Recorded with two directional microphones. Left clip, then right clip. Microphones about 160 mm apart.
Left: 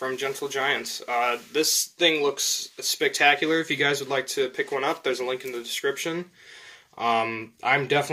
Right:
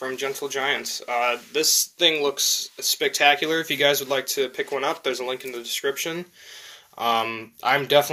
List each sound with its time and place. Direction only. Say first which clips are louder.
0.0 s speech: right 1 dB; 45° left (ahead or behind)